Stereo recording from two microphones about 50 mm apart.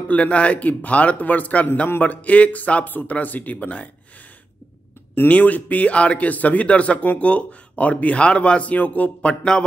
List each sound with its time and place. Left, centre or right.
0.1 s speech: left
5.3 s speech: left